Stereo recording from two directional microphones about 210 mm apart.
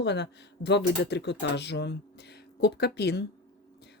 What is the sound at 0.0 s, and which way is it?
Speech, 55° left (ahead or behind).